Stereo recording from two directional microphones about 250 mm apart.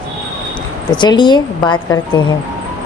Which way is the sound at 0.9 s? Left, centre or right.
Centre.